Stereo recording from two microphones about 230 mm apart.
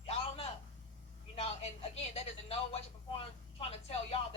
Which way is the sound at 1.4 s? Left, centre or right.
Left.